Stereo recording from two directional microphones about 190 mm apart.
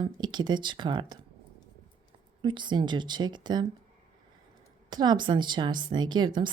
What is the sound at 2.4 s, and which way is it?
A woman's voice, 25° right (ahead or behind).